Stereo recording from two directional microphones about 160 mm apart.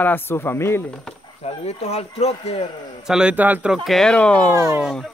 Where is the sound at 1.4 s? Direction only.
40° left (ahead or behind).